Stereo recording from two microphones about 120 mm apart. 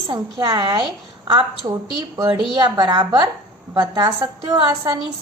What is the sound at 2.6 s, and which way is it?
A woman's voice, 35° right (ahead or behind).